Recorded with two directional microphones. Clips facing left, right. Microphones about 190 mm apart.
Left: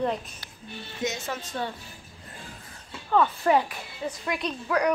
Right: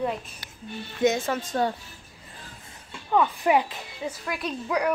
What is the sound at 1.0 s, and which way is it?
Speech, 55° right (ahead or behind).